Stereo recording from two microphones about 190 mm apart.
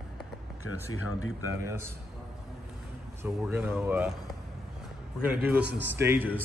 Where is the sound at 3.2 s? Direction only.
10° right (ahead or behind).